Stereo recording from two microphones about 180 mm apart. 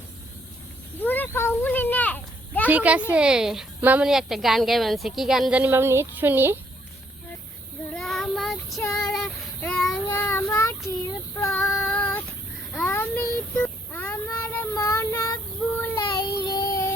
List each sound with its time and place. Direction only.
1.0 s a sound: 10° left (ahead or behind)
2.6 s a woman's voice: 10° right (ahead or behind)
7.9 s child singing: centre (ahead or behind)
11.3 s female singing: 10° left (ahead or behind)
12.7 s child singing: 10° left (ahead or behind)
16.5 s child singing: 20° left (ahead or behind)